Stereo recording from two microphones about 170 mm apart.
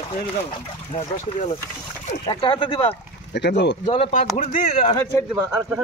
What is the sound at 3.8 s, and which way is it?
Speech, 35° left (ahead or behind).